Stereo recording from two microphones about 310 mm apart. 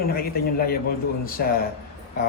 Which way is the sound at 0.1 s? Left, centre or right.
Left.